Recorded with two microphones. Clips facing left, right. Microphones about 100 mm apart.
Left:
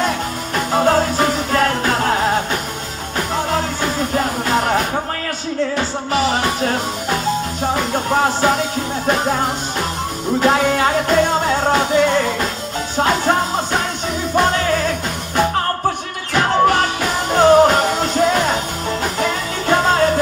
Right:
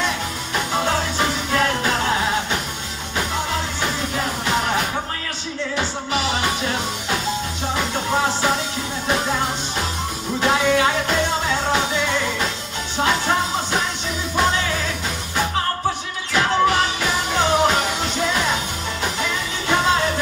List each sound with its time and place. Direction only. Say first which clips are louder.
0.7 s music: left 7 dB; 40° left (ahead or behind)
4.2 s music: left 3 dB; 45° left (ahead or behind)
5.8 s music: left 5 dB; 45° left (ahead or behind)
10.4 s music: left 2 dB; 45° left (ahead or behind)
16.3 s music: left 3 dB; 45° left (ahead or behind)